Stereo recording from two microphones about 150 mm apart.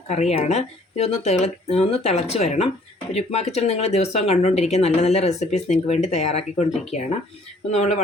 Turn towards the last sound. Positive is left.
turn(degrees=50)  # may be behind; listen again after turning